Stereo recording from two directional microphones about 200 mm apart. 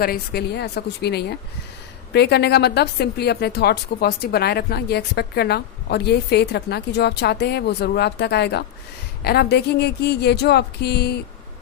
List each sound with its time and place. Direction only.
0.0 s a woman's voice: 50° left (ahead or behind)